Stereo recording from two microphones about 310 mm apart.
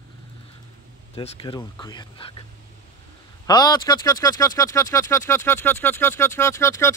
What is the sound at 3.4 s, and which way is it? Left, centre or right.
A man's voice, centre.